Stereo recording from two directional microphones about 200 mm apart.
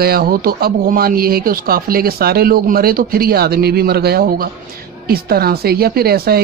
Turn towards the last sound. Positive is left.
turn(degrees=-50)  # may be behind; listen again after turning